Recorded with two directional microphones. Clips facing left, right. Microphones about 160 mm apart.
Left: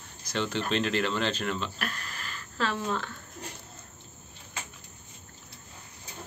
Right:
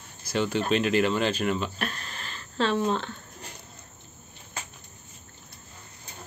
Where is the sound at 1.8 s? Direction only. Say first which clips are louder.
Right 3 dB; 25° right (ahead or behind).